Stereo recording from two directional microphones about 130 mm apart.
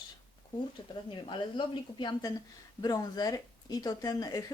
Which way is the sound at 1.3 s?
40° left (ahead or behind).